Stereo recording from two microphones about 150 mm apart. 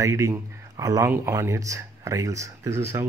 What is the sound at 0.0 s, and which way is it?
A man's voice, 20° right (ahead or behind).